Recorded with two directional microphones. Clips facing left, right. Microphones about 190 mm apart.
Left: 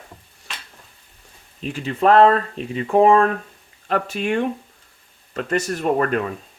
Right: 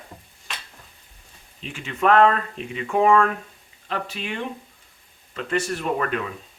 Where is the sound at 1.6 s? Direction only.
35° left (ahead or behind).